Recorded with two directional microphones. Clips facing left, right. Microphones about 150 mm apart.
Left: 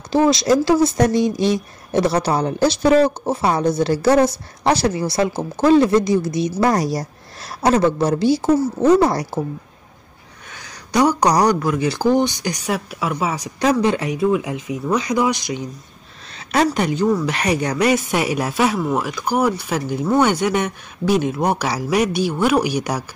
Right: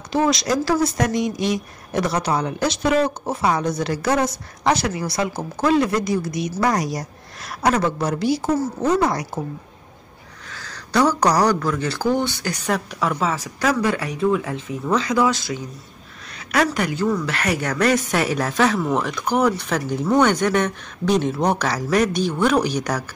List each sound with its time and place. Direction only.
0.1 s a woman's voice: 30° left (ahead or behind)
10.5 s speech: 15° left (ahead or behind)
16.7 s speech: 20° left (ahead or behind)